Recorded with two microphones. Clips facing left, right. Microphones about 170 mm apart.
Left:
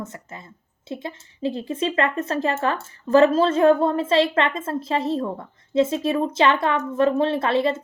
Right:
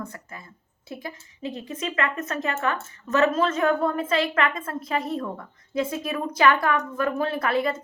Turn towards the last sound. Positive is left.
turn(degrees=25)  # may be behind; listen again after turning